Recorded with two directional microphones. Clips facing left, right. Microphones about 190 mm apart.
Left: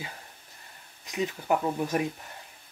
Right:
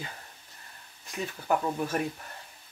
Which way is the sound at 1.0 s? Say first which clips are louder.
Left 4 dB; 15° left (ahead or behind).